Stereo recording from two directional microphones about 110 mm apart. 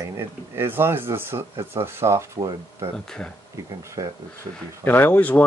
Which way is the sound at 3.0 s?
5° left (ahead or behind).